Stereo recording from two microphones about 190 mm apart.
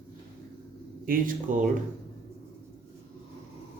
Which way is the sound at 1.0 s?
45° right (ahead or behind).